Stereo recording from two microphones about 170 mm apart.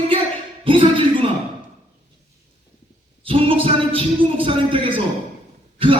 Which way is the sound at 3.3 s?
30° right (ahead or behind).